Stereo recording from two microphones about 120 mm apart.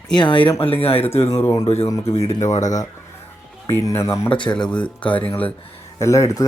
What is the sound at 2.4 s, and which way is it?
Speech, 80° left.